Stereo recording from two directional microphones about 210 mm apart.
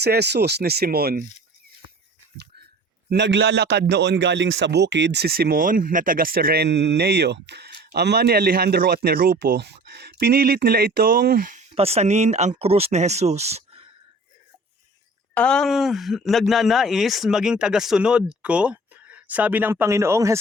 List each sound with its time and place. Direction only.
0.0 s a man's voice: 50° right (ahead or behind)
3.1 s a man's voice: 55° right (ahead or behind)
11.7 s speech: 30° right (ahead or behind)
15.4 s speech: 5° left (ahead or behind); by 20.4 s 15° right (ahead or behind)